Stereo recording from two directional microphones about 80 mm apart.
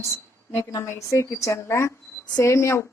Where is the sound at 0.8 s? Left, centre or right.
Left.